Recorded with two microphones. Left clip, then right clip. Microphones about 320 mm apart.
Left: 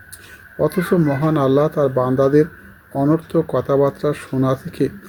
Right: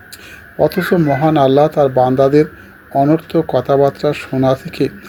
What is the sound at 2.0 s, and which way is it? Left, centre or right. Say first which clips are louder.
Speech: right 5 dB; centre.